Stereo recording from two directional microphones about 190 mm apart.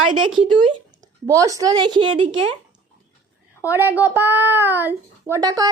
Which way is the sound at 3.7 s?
10° right (ahead or behind).